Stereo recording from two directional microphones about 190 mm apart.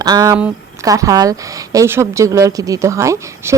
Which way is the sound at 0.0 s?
20° right (ahead or behind).